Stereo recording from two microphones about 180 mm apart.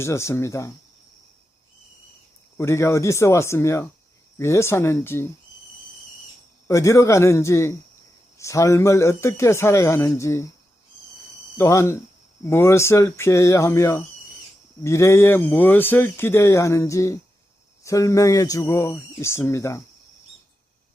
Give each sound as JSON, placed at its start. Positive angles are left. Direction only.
{"t": 0.0, "sound": "speech", "side_deg": 15}
{"t": 2.6, "sound": "speech", "side_deg": 15}
{"t": 6.7, "sound": "speech", "side_deg": 15}
{"t": 11.5, "sound": "speech", "side_deg": 15}